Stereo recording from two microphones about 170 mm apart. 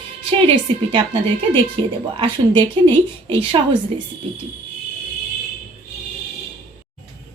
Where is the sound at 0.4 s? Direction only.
30° right (ahead or behind).